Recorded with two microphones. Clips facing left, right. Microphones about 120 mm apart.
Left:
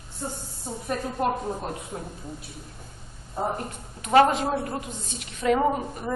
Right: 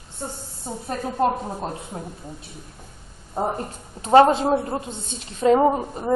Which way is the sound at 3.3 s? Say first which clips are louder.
Right 3 dB; 35° right (ahead or behind).